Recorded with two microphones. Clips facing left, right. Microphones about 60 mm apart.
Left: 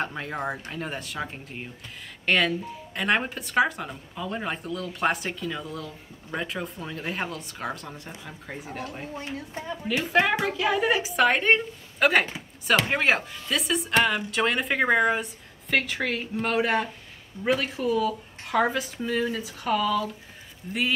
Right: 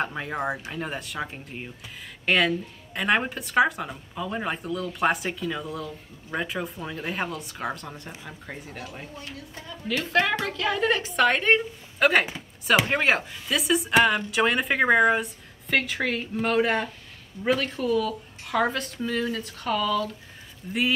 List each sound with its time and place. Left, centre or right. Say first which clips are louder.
0.0 s a woman's voice: right 2 dB; centre
9.1 s speech: left 5 dB; left
10.0 s a woman's voice: left 1 dB; centre